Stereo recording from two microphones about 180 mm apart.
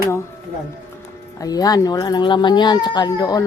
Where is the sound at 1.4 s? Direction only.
20° left (ahead or behind).